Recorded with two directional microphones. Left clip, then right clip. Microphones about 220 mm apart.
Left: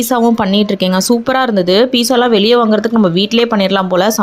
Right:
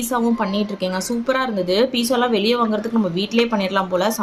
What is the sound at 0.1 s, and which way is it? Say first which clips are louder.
Speech: left 8 dB; 40° left (ahead or behind).